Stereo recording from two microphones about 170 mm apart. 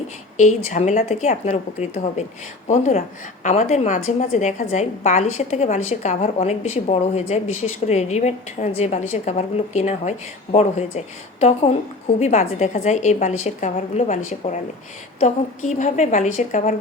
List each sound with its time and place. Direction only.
0.3 s a woman's voice: 45° left (ahead or behind)